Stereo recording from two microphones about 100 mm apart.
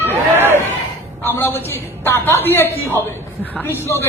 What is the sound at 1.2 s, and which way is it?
A woman's voice, 20° left (ahead or behind).